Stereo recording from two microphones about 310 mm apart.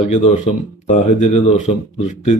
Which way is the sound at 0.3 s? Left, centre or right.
Left.